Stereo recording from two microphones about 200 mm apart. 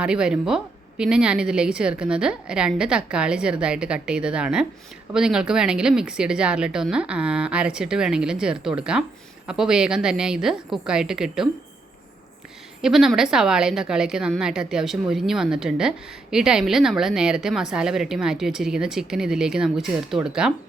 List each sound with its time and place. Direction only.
0.0 s a woman's voice: 5° right (ahead or behind)
12.8 s a woman's voice: centre (ahead or behind)